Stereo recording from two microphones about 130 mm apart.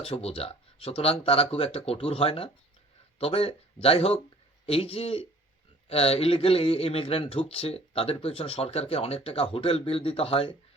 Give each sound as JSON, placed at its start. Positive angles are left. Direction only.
{"t": 0.0, "sound": "speech", "side_deg": 50}